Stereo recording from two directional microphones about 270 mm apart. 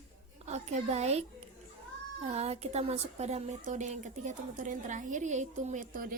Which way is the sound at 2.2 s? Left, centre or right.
Right.